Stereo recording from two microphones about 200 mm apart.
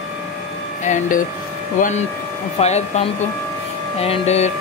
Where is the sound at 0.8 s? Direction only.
40° left (ahead or behind).